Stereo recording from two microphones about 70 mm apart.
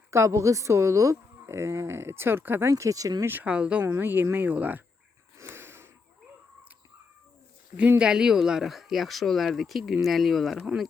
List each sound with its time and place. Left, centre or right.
0.1 s speech: right
3.4 s speech: centre
4.0 s speech: right
5.4 s snort: right
7.9 s speech: centre